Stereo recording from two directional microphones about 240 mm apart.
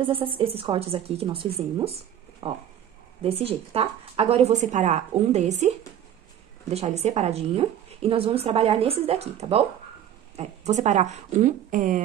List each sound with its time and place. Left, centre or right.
0.4 s a woman's voice: right
6.7 s a woman's voice: right